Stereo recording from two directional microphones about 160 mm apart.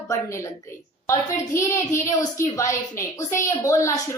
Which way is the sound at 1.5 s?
20° left (ahead or behind).